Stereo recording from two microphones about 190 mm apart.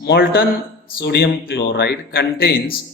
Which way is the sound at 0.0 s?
55° left (ahead or behind).